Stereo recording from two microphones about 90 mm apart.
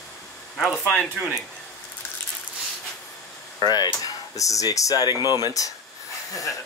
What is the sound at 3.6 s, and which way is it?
Speech, 50° left (ahead or behind).